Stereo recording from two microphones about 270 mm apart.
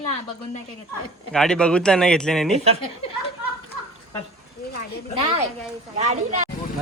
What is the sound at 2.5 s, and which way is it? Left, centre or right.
Speech, right.